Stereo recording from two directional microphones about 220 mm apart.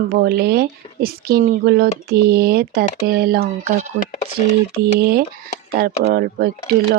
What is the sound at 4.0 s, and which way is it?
Speech, 30° left (ahead or behind).